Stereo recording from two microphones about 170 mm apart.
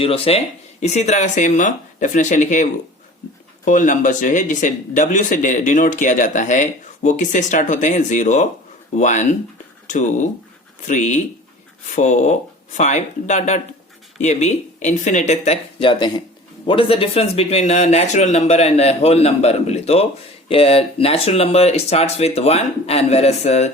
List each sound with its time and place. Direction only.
0.0 s speech: 35° left (ahead or behind)
10.8 s speech: 45° left (ahead or behind)
15.8 s speech: 25° left (ahead or behind)